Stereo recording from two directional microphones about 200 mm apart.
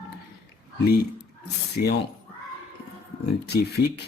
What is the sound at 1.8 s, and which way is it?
Speech, 45° left (ahead or behind).